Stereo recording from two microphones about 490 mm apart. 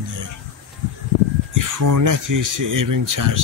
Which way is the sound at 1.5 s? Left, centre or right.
Right.